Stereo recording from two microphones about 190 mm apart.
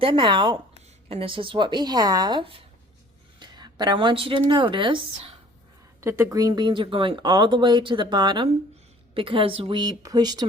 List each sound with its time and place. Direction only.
0.0 s a woman's voice: 25° right (ahead or behind)
6.0 s speech: 15° right (ahead or behind)